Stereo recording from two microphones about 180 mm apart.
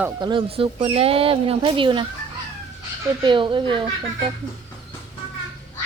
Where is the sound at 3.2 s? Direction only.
25° right (ahead or behind).